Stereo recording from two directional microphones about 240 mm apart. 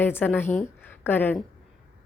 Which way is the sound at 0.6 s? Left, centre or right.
Centre.